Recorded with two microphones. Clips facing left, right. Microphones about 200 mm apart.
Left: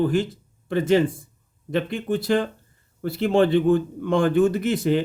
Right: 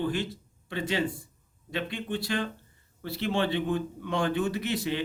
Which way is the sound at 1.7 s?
45° left (ahead or behind).